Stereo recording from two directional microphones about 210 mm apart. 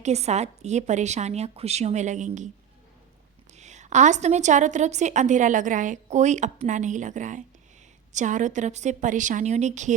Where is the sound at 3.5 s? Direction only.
35° right (ahead or behind).